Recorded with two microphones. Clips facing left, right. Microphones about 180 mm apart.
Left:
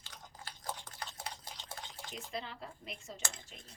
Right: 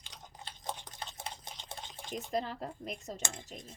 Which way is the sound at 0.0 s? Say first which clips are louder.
Right 1 dB; 20° right (ahead or behind).